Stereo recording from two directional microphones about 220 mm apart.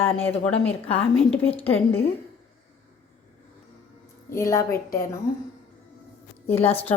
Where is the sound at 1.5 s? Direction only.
25° left (ahead or behind).